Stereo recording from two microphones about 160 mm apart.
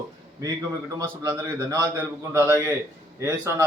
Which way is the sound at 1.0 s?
20° right (ahead or behind).